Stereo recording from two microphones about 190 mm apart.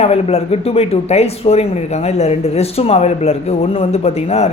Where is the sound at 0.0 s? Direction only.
30° left (ahead or behind).